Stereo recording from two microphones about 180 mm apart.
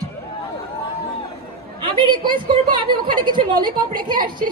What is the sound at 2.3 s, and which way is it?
A woman's voice, 25° right (ahead or behind).